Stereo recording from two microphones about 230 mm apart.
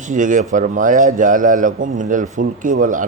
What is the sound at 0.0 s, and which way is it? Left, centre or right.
A man's voice, right.